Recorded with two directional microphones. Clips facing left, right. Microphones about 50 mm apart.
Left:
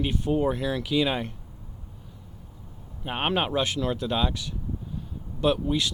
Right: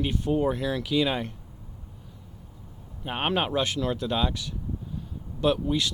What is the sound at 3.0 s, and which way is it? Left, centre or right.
Speech, centre.